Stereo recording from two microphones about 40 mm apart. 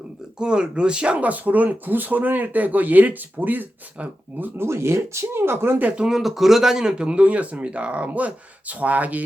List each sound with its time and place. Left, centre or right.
0.3 s speech: right
1.2 s speech: right
4.5 s speech: right
6.1 s a man's voice: centre
7.0 s speech: right